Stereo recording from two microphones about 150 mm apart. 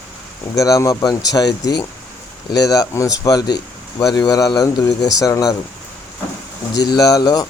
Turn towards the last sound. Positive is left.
turn(degrees=25)  # may be behind; listen again after turning